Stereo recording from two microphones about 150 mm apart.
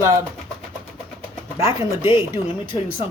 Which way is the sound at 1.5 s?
20° right (ahead or behind).